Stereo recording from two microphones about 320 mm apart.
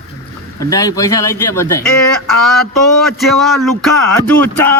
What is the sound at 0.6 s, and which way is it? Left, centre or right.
Speech, centre.